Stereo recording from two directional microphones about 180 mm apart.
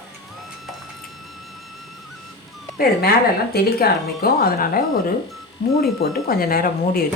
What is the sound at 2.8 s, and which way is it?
Speech, 55° left (ahead or behind).